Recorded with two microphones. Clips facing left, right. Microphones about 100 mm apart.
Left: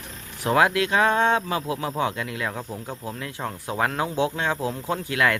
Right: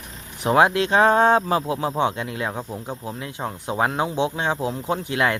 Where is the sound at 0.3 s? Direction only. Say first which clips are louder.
Right 3 dB; 20° right (ahead or behind).